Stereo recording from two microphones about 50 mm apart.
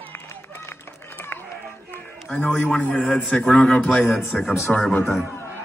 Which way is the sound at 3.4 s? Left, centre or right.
Centre.